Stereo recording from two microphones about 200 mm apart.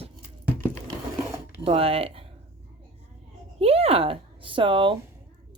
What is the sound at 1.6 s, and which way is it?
Speech, 30° right (ahead or behind).